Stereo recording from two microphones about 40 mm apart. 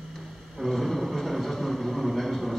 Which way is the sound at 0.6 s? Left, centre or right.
Centre.